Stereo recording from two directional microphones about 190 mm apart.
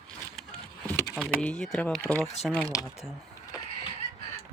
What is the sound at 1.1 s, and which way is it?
Speech, centre (ahead or behind).